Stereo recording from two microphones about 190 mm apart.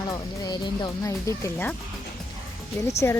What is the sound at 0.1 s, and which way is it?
Speech, 20° left (ahead or behind).